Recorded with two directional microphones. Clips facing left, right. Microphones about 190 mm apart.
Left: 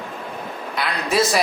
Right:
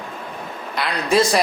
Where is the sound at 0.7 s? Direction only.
Centre (ahead or behind).